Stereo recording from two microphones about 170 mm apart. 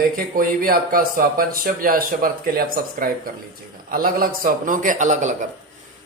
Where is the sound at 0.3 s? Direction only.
60° right (ahead or behind).